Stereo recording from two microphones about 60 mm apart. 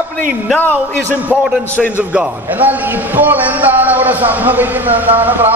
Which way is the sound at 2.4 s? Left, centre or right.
Right.